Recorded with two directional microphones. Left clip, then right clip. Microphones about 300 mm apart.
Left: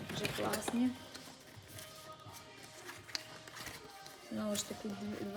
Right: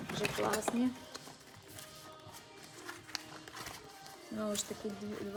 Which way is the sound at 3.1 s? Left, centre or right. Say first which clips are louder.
Left 1 dB; centre.